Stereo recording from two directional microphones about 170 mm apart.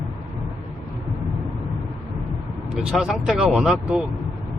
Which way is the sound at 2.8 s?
5° right (ahead or behind).